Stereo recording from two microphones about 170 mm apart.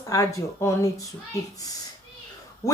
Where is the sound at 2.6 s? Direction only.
20° left (ahead or behind).